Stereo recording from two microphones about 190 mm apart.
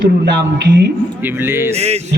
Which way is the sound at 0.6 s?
60° right (ahead or behind).